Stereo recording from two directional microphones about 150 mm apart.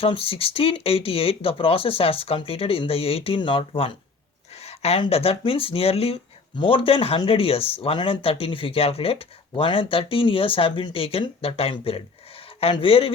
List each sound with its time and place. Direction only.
0.0 s speech: 40° left (ahead or behind)